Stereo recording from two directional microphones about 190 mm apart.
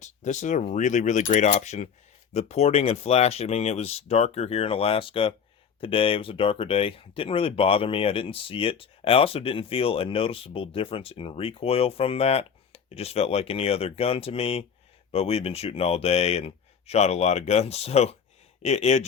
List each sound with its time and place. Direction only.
0.0 s speech: 40° left (ahead or behind)